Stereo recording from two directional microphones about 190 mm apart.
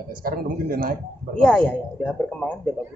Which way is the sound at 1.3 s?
5° left (ahead or behind).